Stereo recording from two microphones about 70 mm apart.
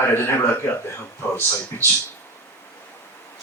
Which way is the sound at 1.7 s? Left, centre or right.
Left.